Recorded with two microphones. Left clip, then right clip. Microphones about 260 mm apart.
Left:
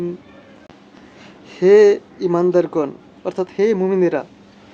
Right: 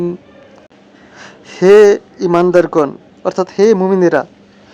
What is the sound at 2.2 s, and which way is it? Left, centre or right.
Speech, right.